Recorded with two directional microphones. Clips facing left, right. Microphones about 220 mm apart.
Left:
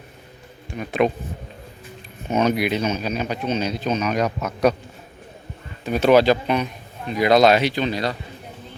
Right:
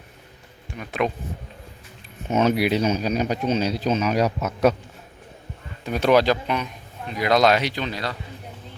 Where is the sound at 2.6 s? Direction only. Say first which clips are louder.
Right 1 dB; 35° right (ahead or behind).